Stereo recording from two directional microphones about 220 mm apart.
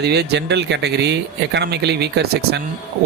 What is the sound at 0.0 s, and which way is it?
A man's voice, 50° right (ahead or behind).